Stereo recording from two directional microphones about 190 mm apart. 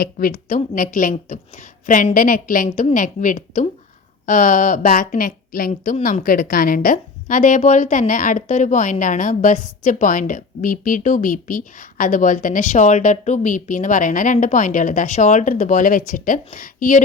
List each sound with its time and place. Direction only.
0.0 s a woman's voice: 50° left (ahead or behind)